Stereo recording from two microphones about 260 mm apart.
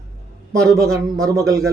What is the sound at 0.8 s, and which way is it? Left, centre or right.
Speech, centre.